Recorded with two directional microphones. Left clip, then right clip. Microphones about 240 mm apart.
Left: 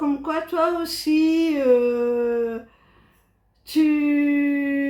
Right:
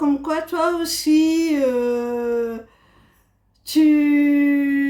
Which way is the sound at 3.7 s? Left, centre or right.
Right.